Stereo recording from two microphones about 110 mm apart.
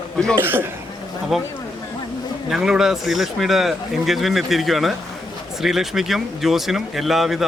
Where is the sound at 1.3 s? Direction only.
5° right (ahead or behind).